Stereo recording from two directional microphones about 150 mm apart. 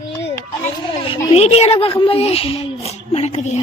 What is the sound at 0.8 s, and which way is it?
Speech, 35° left (ahead or behind).